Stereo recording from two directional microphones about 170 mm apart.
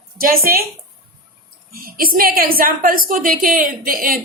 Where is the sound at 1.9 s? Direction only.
60° right (ahead or behind).